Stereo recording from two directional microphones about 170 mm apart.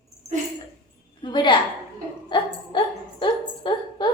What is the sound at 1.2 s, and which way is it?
A woman's voice, 25° left (ahead or behind).